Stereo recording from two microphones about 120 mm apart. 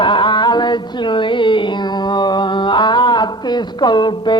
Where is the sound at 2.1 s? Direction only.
35° left (ahead or behind).